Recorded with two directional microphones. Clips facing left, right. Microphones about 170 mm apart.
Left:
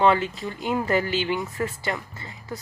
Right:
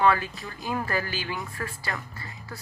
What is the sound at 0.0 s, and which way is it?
Speech, 25° left (ahead or behind).